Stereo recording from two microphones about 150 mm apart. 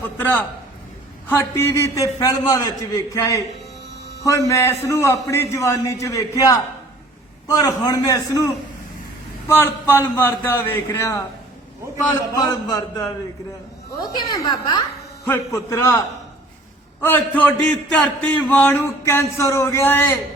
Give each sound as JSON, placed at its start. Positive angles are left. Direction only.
{"t": 1.3, "sound": "a man's voice", "side_deg": 15}
{"t": 9.5, "sound": "a man's voice", "side_deg": 15}
{"t": 12.4, "sound": "a man's voice", "side_deg": 25}